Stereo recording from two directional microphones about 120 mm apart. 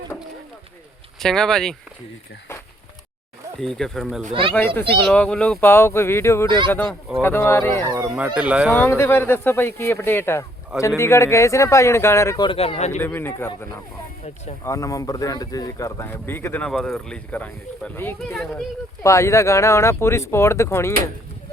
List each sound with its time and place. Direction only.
1.2 s speech: 5° left (ahead or behind)
3.6 s speech: 5° left (ahead or behind)
4.5 s speech: 15° left (ahead or behind)
7.9 s speech: 25° right (ahead or behind)
8.1 s speech: 10° right (ahead or behind)
8.7 s speech: 20° left (ahead or behind)
12.4 s speech: 50° left (ahead or behind)
13.0 s speech: 20° left (ahead or behind)
16.6 s speech: 5° left (ahead or behind); by 20.9 s 20° left (ahead or behind)